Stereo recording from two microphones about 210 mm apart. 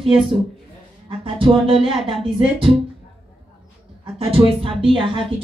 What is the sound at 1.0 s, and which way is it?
Speech, 25° right (ahead or behind).